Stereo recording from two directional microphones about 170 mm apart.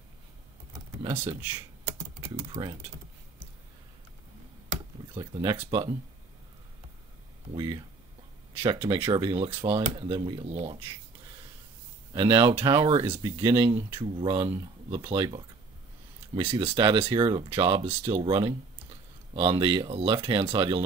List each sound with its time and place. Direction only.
1.2 s typing: 15° right (ahead or behind)
2.5 s speech: 30° right (ahead or behind)
5.1 s speech: 25° right (ahead or behind)
7.5 s speech: 25° right (ahead or behind)
10.4 s speech: 35° right (ahead or behind)
12.1 s speech: 25° right (ahead or behind)
13.0 s speech: 10° right (ahead or behind)
13.4 s speech: 25° right (ahead or behind)